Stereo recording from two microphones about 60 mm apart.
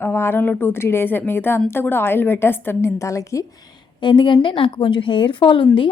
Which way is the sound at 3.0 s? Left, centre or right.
Left.